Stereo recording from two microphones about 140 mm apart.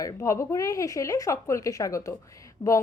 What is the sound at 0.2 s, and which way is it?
Speech, 20° left (ahead or behind).